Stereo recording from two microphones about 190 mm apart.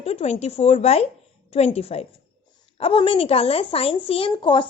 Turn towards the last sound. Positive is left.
turn(degrees=25)  # may be behind; listen again after turning